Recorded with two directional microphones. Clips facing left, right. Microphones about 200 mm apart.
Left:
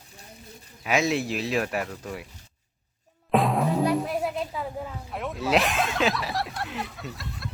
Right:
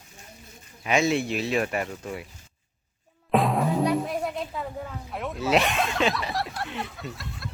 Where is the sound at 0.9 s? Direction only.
Centre (ahead or behind).